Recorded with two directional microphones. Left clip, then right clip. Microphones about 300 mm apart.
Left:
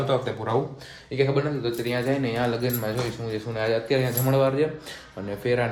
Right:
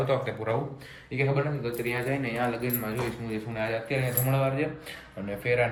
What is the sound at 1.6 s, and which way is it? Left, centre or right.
Speech, centre.